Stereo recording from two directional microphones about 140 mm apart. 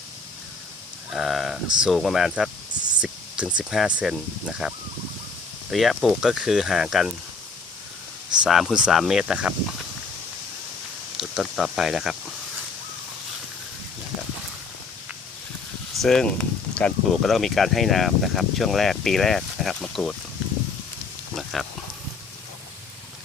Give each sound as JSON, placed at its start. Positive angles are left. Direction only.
{"t": 1.1, "sound": "speech", "side_deg": 0}
{"t": 3.0, "sound": "a sound", "side_deg": -5}
{"t": 3.6, "sound": "speech", "side_deg": 0}
{"t": 5.7, "sound": "speech", "side_deg": 0}
{"t": 8.4, "sound": "speech", "side_deg": 0}
{"t": 11.2, "sound": "speech", "side_deg": 0}
{"t": 16.0, "sound": "speech", "side_deg": 5}
{"t": 21.3, "sound": "a sound", "side_deg": 0}